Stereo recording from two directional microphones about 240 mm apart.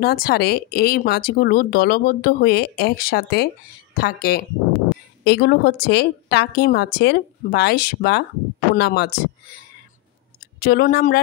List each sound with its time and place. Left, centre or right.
0.0 s a woman's voice: left
10.6 s speech: left